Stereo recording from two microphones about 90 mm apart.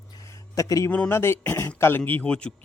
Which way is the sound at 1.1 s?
25° left (ahead or behind).